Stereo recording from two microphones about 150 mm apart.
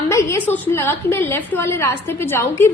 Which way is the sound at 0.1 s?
20° left (ahead or behind).